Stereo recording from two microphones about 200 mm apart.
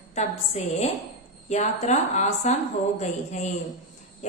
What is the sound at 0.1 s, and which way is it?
A woman's voice, 35° left (ahead or behind).